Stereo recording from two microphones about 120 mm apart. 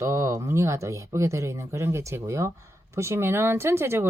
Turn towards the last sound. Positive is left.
turn(degrees=-20)  # may be behind; listen again after turning